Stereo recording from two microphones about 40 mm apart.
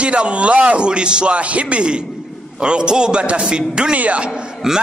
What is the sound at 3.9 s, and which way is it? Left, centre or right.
Speech, right.